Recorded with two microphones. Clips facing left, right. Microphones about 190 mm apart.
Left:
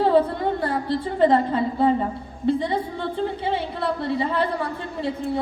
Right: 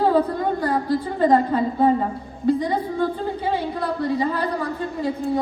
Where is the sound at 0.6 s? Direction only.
25° left (ahead or behind).